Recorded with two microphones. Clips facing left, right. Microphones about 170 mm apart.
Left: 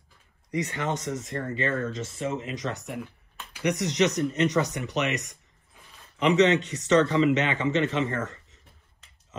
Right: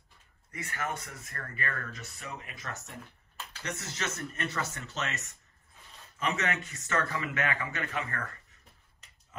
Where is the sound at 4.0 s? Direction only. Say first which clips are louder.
Left 13 dB; 15° left (ahead or behind).